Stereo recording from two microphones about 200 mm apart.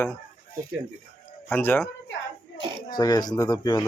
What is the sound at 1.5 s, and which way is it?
Speech, 10° left (ahead or behind).